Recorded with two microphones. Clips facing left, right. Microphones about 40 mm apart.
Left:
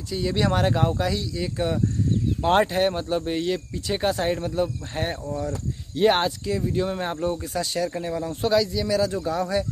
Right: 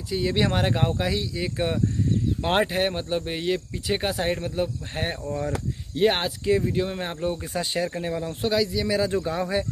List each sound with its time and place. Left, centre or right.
0.1 s speech: centre
6.4 s speech: right
7.4 s speech: right; by 8.9 s centre
9.2 s speech: right